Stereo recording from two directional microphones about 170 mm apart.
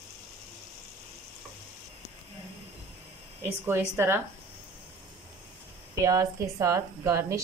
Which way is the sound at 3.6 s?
15° right (ahead or behind).